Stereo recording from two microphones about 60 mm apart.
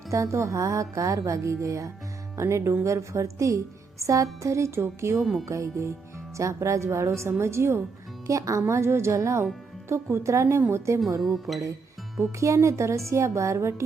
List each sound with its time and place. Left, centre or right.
0.1 s speech: right
5.2 s music: centre
5.5 s speech: right
8.3 s speech: right
11.2 s music: centre
12.4 s speech: right